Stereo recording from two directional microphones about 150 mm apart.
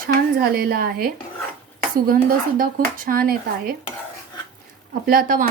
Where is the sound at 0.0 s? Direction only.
80° right.